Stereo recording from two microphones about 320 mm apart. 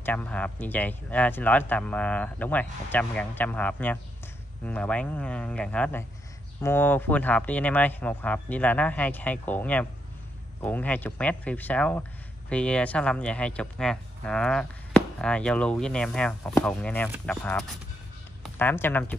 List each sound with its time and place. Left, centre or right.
0.0 s speech: centre